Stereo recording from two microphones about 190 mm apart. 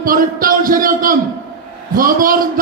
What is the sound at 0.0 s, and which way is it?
A man's voice, 50° right (ahead or behind).